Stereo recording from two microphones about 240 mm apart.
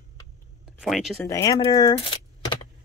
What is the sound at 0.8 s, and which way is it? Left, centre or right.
Speech, centre.